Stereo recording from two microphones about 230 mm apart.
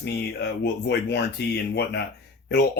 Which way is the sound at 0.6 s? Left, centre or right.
Left.